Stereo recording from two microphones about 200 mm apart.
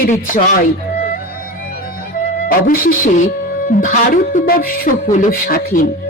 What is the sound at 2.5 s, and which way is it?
Speech, 45° left (ahead or behind).